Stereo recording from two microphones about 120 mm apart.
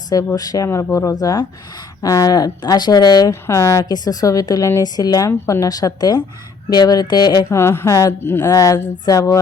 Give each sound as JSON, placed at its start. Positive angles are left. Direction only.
{"t": 0.3, "sound": "a woman's voice", "side_deg": 30}
{"t": 3.4, "sound": "a woman's voice", "side_deg": 25}
{"t": 7.5, "sound": "speech", "side_deg": 20}